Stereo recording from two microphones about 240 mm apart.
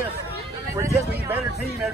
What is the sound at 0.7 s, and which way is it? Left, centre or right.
Speech, centre.